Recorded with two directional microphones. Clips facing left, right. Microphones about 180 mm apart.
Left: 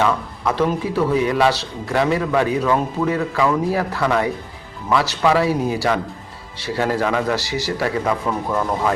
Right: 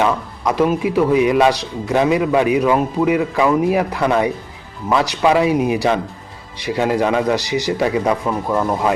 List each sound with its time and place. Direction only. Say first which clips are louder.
0.0 s a man's voice: right 2 dB; 15° right (ahead or behind)